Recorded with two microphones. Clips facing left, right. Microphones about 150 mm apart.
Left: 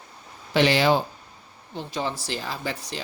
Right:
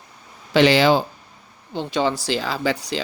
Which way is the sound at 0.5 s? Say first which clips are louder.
Right 5 dB; 90° right.